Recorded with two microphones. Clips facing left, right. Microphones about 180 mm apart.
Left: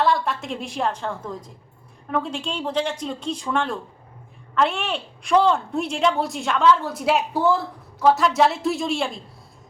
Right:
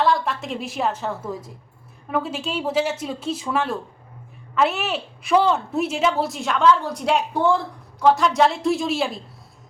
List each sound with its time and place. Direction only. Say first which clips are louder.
0.0 s a woman's voice: right 1 dB; centre (ahead or behind)